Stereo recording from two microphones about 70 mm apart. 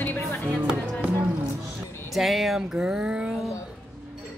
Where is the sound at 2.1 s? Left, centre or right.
Centre.